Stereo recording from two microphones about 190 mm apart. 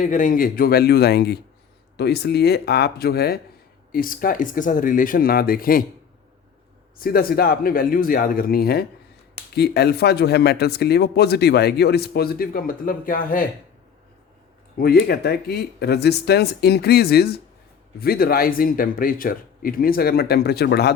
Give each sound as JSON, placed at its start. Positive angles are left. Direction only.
{"t": 0.0, "sound": "speech", "side_deg": 40}
{"t": 7.0, "sound": "speech", "side_deg": 50}
{"t": 14.8, "sound": "speech", "side_deg": 55}